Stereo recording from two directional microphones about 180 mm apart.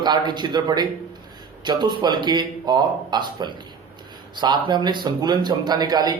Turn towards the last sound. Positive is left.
turn(degrees=-20)  # may be behind; listen again after turning